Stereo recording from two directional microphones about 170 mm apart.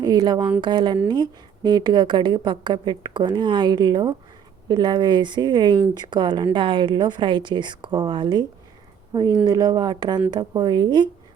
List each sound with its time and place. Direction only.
0.0 s a woman's voice: 25° right (ahead or behind)